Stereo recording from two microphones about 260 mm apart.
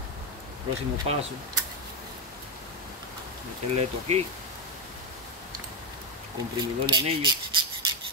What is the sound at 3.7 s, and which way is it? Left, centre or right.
Speech, right.